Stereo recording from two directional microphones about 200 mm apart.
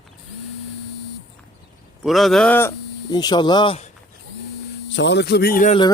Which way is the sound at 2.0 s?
Centre (ahead or behind).